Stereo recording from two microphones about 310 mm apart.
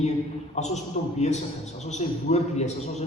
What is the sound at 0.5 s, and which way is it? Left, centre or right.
A man's voice, left.